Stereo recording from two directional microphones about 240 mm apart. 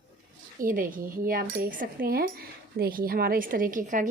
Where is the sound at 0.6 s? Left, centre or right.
Right.